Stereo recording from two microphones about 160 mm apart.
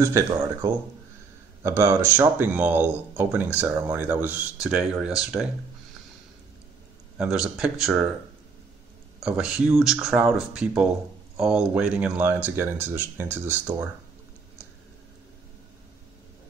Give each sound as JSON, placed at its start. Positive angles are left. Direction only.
{"t": 0.0, "sound": "speech", "side_deg": -20}
{"t": 7.2, "sound": "speech", "side_deg": -5}
{"t": 9.2, "sound": "speech", "side_deg": -5}